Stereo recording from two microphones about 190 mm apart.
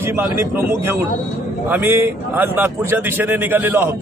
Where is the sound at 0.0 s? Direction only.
10° right (ahead or behind).